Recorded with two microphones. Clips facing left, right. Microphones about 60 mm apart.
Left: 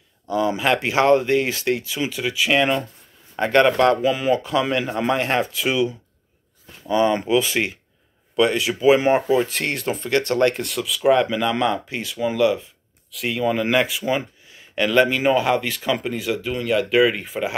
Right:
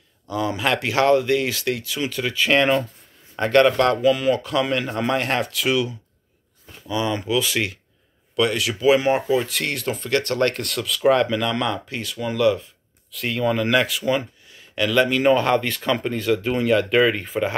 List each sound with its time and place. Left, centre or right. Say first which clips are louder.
0.3 s speech: left 3 dB; left
2.2 s speech: right 1 dB; centre
3.3 s speech: even; centre
6.9 s speech: left 5 dB; left; by 12.6 s centre
13.1 s speech: even; centre